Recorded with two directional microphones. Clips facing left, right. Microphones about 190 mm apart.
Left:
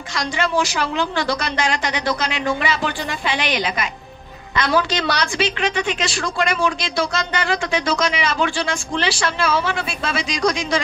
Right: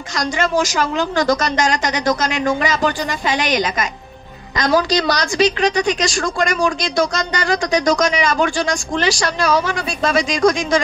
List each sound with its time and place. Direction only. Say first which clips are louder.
0.1 s a woman's voice: right 3 dB; 45° right (ahead or behind)